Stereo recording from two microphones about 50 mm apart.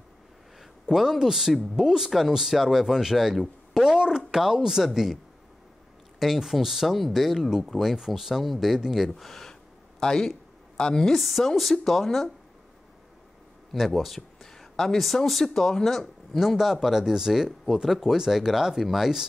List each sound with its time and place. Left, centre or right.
0.8 s speech: centre
9.1 s a sound: centre
10.8 s a woman's voice: centre
11.1 s speech: centre
13.7 s speech: centre
16.4 s speech: centre